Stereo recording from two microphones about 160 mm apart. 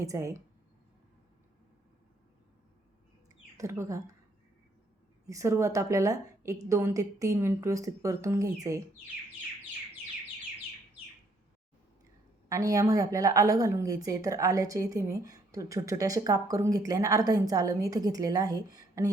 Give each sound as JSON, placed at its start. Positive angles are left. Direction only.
{"t": 0.0, "sound": "a woman's voice", "side_deg": -20}
{"t": 3.6, "sound": "a woman's voice", "side_deg": -20}
{"t": 5.2, "sound": "a woman's voice", "side_deg": -20}
{"t": 12.5, "sound": "a woman's voice", "side_deg": -20}